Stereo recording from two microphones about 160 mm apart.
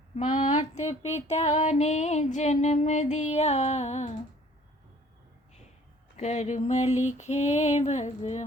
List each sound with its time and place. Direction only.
0.3 s music: 50° left (ahead or behind)
6.1 s music: 45° left (ahead or behind)